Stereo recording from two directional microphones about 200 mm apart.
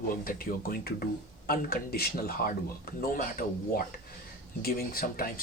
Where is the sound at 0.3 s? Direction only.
45° left (ahead or behind).